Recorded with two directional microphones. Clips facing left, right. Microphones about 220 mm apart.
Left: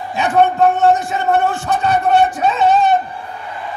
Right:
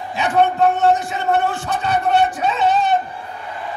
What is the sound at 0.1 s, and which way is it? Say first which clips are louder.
A man's voice: left 3 dB; 45° left (ahead or behind).